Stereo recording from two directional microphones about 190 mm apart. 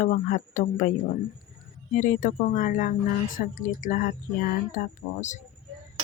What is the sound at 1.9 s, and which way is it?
Speech, 45° left (ahead or behind).